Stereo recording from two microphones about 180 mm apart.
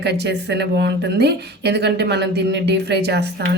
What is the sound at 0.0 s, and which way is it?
Speech, 70° right (ahead or behind).